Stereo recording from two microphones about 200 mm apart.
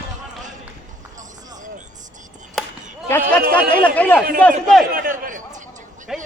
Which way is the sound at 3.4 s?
50° right (ahead or behind).